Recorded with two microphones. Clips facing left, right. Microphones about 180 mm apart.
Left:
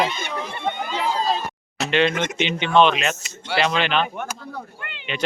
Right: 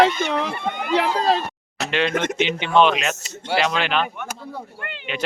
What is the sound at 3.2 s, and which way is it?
Speech, 40° right (ahead or behind).